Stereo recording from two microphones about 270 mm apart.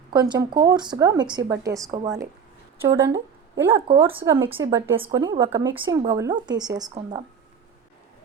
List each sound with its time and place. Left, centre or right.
0.1 s speech: centre